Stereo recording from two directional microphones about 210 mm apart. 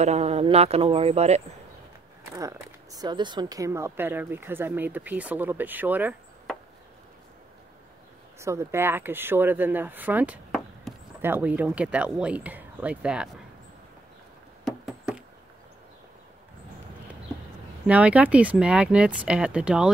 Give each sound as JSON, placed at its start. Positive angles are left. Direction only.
{"t": 0.0, "sound": "speech", "side_deg": -30}
{"t": 2.3, "sound": "speech", "side_deg": -15}
{"t": 8.4, "sound": "speech", "side_deg": -15}
{"t": 14.6, "sound": "rodents", "side_deg": -5}
{"t": 17.8, "sound": "speech", "side_deg": -5}